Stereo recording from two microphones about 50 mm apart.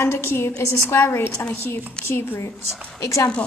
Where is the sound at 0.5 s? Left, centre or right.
Left.